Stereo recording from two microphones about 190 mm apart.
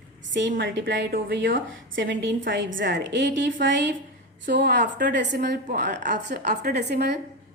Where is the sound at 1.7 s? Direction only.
80° right.